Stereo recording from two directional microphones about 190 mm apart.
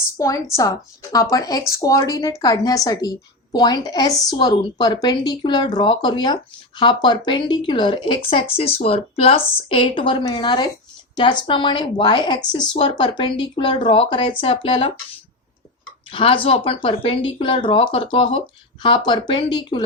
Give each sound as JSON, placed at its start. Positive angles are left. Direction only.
{"t": 0.2, "sound": "a woman's voice", "side_deg": 15}
{"t": 16.1, "sound": "a woman's voice", "side_deg": 30}